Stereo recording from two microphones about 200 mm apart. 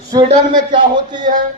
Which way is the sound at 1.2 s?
40° right (ahead or behind).